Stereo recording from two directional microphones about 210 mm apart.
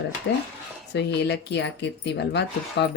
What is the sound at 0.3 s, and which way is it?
Speech, 55° left (ahead or behind).